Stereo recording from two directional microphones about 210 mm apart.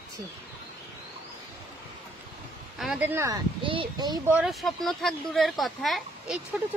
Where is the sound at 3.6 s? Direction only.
25° right (ahead or behind).